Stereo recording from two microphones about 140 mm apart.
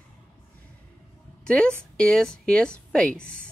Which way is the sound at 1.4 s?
5° left (ahead or behind).